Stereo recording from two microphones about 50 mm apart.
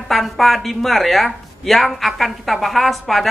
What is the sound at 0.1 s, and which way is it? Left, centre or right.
Speech, centre.